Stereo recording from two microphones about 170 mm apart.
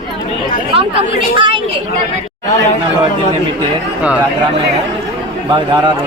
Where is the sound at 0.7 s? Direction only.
30° right (ahead or behind).